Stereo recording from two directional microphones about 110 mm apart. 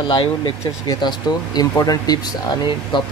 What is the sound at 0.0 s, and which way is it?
Speech, 45° left (ahead or behind).